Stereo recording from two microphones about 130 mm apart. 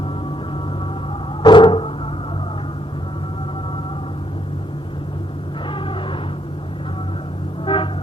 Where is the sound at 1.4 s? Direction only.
40° left (ahead or behind).